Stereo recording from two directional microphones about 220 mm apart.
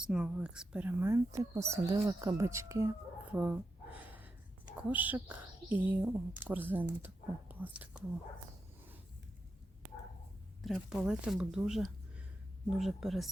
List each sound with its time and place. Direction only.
0.0 s speech: 5° right (ahead or behind)
3.3 s gasp: 5° right (ahead or behind)
4.8 s speech: 5° right (ahead or behind)
10.6 s speech: centre (ahead or behind)